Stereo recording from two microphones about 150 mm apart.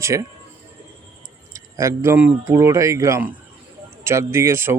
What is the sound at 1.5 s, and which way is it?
Speech, 20° right (ahead or behind).